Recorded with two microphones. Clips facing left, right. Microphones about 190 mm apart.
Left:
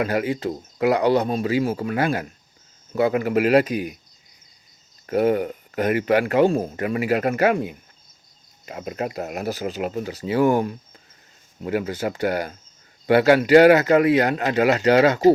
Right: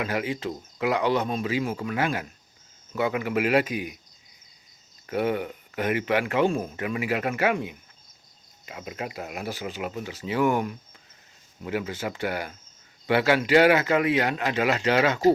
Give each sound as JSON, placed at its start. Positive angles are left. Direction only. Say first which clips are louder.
{"t": 0.0, "sound": "speech", "louder": "left 6 dB", "side_deg": 45}
{"t": 5.0, "sound": "speech", "louder": "left 6 dB", "side_deg": 40}
{"t": 11.6, "sound": "speech", "louder": "left 5 dB", "side_deg": 45}